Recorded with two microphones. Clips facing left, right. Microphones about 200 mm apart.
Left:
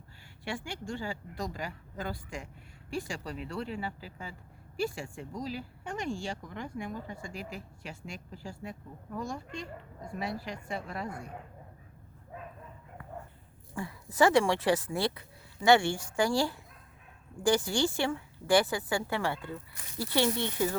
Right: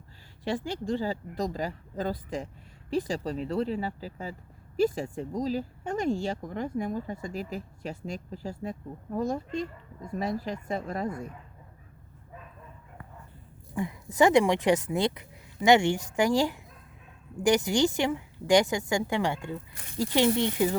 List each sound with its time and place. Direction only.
0.4 s a woman's voice: 35° right (ahead or behind)
13.7 s a woman's voice: 20° right (ahead or behind)